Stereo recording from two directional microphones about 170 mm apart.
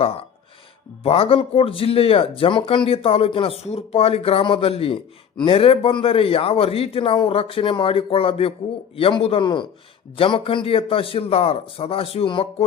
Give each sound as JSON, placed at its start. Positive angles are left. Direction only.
{"t": 0.0, "sound": "speech", "side_deg": 35}